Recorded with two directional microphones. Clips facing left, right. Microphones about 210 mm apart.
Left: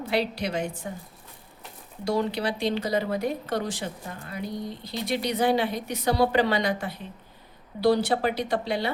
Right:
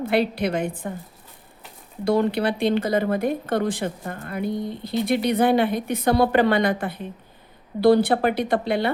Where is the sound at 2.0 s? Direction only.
55° right (ahead or behind).